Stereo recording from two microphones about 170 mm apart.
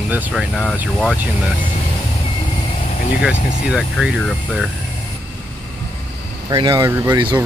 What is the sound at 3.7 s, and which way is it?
Speech, 5° right (ahead or behind).